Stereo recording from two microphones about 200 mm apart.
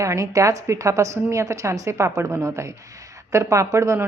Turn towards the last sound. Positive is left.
turn(degrees=-15)  # may be behind; listen again after turning